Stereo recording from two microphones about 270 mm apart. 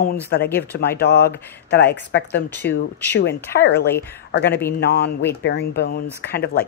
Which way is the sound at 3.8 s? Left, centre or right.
Centre.